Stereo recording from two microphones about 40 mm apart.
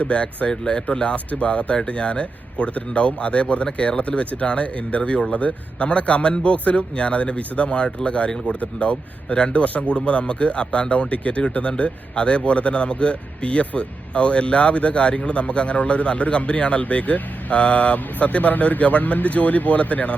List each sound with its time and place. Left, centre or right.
0.0 s a man's voice: left
1.1 s a man's voice: left